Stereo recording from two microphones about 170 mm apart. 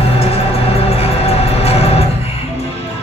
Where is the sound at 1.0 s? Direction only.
35° left (ahead or behind).